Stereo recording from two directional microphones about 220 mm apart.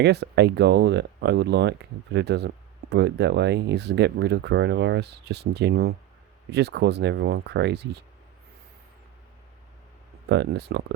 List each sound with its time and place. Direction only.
0.0 s speech: 50° right (ahead or behind)
10.2 s speech: 50° right (ahead or behind)